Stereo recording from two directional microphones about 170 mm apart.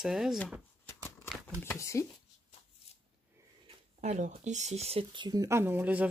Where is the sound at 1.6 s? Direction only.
15° left (ahead or behind).